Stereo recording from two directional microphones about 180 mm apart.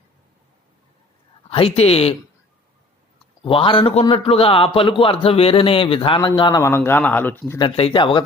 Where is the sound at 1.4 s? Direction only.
30° left (ahead or behind).